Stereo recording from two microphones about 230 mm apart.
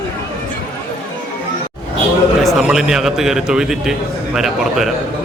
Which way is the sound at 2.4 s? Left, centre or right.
Centre.